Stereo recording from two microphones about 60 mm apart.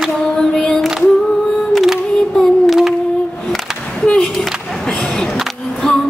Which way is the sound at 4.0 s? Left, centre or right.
Centre.